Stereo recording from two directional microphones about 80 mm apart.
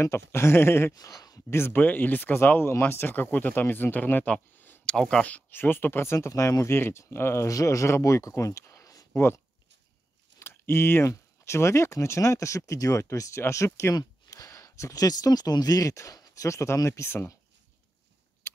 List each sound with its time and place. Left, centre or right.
0.0 s speech: left
0.9 s speech: left
1.5 s speech: left
4.8 s speech: centre
5.2 s speech: left
10.4 s speech: left